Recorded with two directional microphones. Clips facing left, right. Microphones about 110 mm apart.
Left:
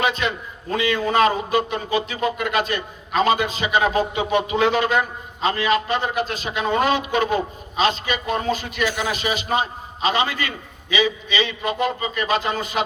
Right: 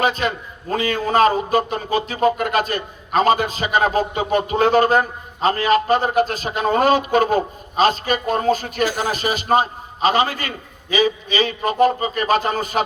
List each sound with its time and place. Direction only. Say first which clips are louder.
0.0 s a man's voice: right 2 dB; 40° right (ahead or behind)